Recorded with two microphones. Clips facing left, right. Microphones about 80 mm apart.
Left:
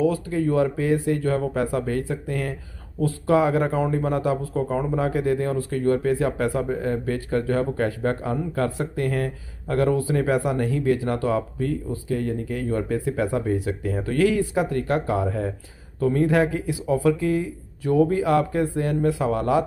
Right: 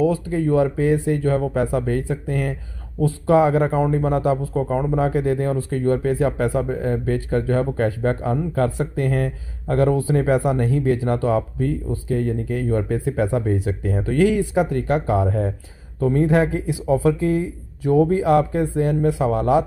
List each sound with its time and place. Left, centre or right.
0.3 s speech: right
12.1 s speech: right